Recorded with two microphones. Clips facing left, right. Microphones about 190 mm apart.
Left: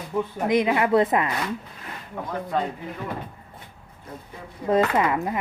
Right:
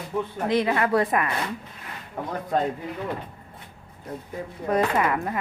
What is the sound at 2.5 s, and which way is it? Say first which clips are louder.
Speech: right 2 dB; 45° right (ahead or behind).